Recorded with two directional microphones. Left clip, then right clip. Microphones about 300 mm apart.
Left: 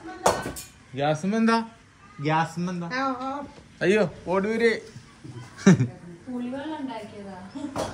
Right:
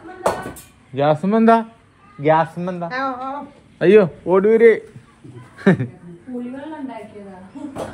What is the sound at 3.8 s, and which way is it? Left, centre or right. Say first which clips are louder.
Speech: right 10 dB; centre.